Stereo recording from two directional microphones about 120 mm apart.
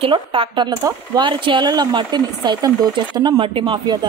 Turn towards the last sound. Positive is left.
turn(degrees=-40)  # may be behind; listen again after turning